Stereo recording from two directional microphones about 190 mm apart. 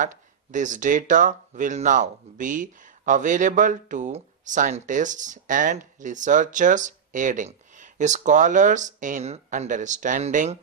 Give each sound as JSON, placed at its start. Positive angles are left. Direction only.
{"t": 0.5, "sound": "speech", "side_deg": -40}